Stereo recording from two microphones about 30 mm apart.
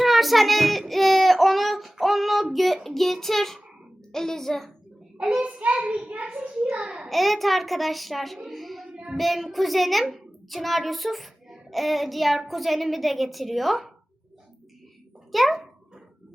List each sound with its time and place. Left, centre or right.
0.0 s speech: centre
2.8 s child singing: centre
5.4 s a child's voice: right
7.1 s speech: centre
8.4 s a sound: centre
9.1 s speech: centre
10.1 s child singing: centre
12.5 s speech: centre
15.3 s speech: centre